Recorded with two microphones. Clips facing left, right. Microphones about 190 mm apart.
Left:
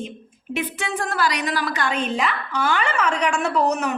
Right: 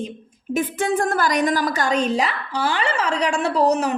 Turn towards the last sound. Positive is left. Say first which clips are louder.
# right 3 dB
turn(degrees=-35)  # may be behind; listen again after turning